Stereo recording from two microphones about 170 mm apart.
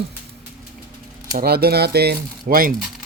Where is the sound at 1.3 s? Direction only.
65° right (ahead or behind).